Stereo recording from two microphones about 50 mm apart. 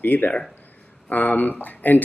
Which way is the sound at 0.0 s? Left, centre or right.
Left.